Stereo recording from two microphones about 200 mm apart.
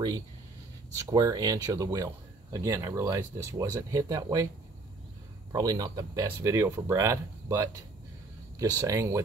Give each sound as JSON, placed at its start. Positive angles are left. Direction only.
{"t": 0.9, "sound": "speech", "side_deg": -20}
{"t": 5.5, "sound": "speech", "side_deg": -20}